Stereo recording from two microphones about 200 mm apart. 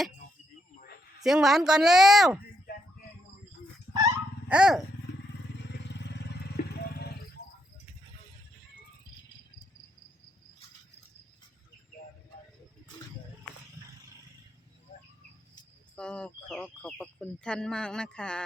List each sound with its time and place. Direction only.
1.2 s speech: centre (ahead or behind)
3.9 s dog: 15° right (ahead or behind)
4.4 s dog: 5° right (ahead or behind)
5.6 s vehicle: 60° left (ahead or behind)
7.4 s cricket: 55° left (ahead or behind)
16.0 s speech: 5° left (ahead or behind)